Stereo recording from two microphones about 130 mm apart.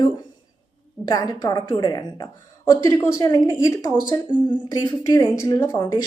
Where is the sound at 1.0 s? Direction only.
30° left (ahead or behind).